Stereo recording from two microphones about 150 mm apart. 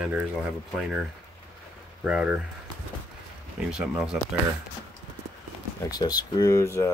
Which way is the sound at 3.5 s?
5° right (ahead or behind).